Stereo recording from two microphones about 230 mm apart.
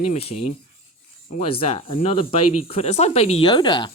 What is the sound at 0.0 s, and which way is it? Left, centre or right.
Speech, left.